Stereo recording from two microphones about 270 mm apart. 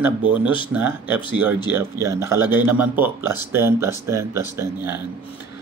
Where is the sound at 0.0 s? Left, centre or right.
Centre.